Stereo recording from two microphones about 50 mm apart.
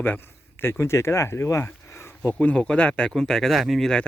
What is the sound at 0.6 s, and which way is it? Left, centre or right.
Speech, left.